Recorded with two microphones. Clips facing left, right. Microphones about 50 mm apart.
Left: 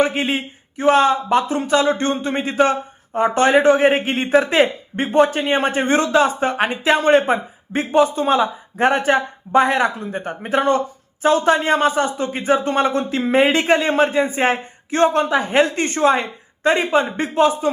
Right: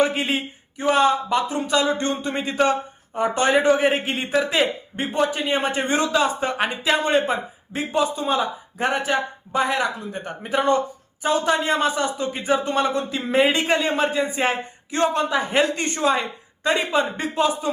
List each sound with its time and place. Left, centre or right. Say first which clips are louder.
0.0 s speech: left 2 dB; left
7.8 s speech: left 6 dB; left